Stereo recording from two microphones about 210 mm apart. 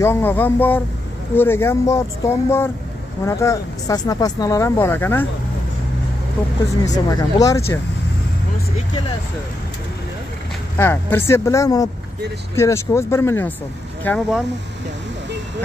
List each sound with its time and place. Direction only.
0.0 s speech: 10° left (ahead or behind)
6.8 s speech: 15° left (ahead or behind)
10.8 s speech: 10° left (ahead or behind)